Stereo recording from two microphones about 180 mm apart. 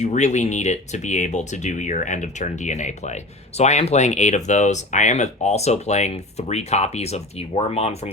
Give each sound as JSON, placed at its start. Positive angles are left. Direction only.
{"t": 0.0, "sound": "speech", "side_deg": 40}